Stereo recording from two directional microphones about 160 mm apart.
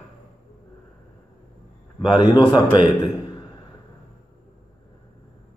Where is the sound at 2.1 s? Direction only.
25° left (ahead or behind).